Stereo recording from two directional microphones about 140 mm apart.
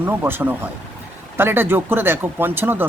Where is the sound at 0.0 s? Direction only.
15° right (ahead or behind).